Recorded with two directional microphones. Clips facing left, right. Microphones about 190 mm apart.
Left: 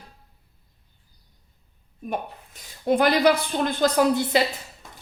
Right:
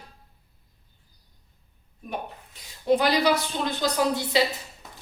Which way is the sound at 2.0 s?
50° left (ahead or behind).